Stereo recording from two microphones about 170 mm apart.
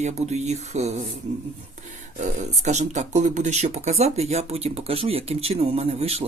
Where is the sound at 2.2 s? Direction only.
45° right (ahead or behind).